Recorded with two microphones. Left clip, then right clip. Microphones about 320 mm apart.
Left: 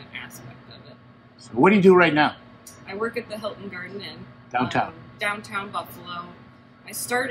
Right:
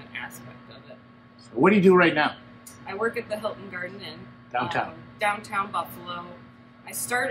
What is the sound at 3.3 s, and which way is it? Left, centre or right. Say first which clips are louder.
Speech: right 1 dB; centre.